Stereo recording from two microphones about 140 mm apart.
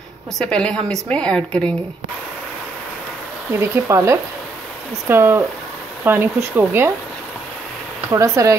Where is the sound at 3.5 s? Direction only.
20° right (ahead or behind).